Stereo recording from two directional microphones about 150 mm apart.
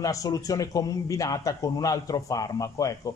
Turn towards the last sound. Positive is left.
turn(degrees=25)  # may be behind; listen again after turning